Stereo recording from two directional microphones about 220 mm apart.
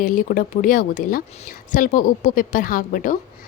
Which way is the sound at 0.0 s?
35° left (ahead or behind).